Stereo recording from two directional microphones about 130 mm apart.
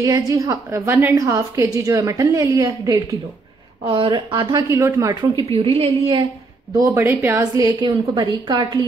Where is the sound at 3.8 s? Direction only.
40° right (ahead or behind).